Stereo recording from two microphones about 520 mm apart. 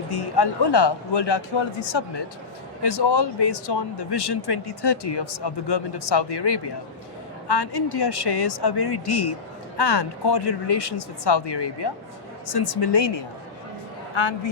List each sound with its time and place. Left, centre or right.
0.1 s a man's voice: left